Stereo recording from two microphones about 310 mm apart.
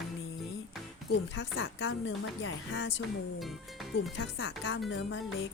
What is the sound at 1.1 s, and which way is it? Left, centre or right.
A woman's voice, left.